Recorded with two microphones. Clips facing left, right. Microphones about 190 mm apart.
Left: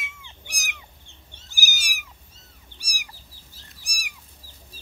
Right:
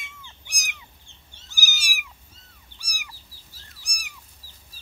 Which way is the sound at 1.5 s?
50° left (ahead or behind).